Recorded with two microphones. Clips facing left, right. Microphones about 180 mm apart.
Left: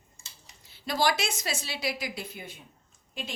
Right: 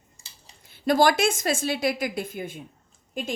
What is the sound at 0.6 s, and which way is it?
A woman's voice, 50° right (ahead or behind).